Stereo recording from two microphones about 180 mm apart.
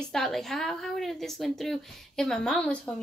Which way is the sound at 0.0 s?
Centre (ahead or behind).